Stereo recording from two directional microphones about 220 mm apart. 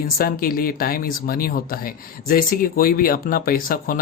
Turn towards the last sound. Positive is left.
turn(degrees=40)  # may be behind; listen again after turning